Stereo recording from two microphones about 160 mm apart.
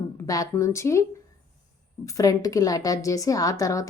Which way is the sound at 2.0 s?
20° left (ahead or behind).